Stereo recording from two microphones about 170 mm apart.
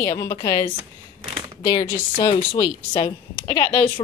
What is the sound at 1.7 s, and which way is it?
Speech, 30° left (ahead or behind).